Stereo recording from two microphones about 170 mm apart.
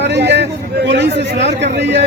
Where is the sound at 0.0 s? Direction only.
90° right.